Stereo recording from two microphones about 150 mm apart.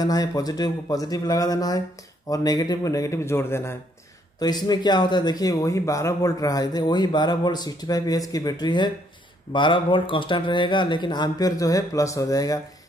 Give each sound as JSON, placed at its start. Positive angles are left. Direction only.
{"t": 0.0, "sound": "speech", "side_deg": 25}
{"t": 4.4, "sound": "speech", "side_deg": 25}